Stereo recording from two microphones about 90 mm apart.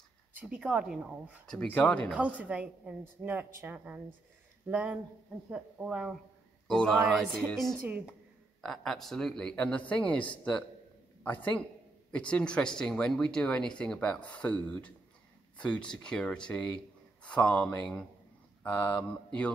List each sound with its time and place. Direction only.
0.3 s a woman's voice: 15° right (ahead or behind)
1.7 s speech: 15° left (ahead or behind)
2.0 s a woman's voice: 15° right (ahead or behind)
6.7 s speech: 5° left (ahead or behind)
7.8 s speech: 20° right (ahead or behind)
8.5 s speech: 5° left (ahead or behind)
12.1 s speech: 15° left (ahead or behind)